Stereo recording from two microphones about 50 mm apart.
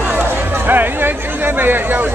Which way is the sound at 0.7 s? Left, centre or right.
Right.